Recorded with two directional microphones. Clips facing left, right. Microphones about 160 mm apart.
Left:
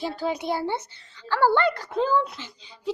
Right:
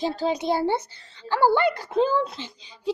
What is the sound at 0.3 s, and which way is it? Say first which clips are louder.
Speech: right 4 dB; 25° right (ahead or behind).